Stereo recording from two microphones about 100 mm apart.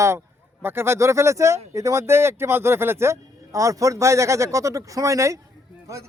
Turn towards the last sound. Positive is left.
turn(degrees=-30)  # may be behind; listen again after turning